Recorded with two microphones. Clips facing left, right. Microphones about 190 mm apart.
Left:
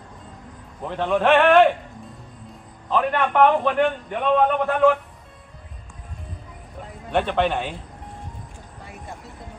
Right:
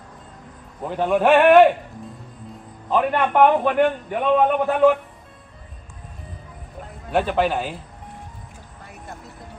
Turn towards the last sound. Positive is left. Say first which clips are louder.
# right 1 dB
turn(degrees=-5)  # may be behind; listen again after turning